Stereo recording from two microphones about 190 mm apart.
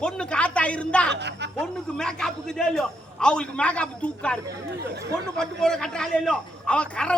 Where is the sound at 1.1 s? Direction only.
65° right (ahead or behind).